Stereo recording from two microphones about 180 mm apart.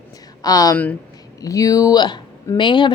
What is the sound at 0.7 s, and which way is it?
Speech, 10° left (ahead or behind).